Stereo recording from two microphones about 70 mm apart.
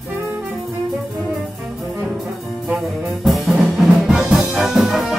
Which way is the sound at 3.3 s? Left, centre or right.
Centre.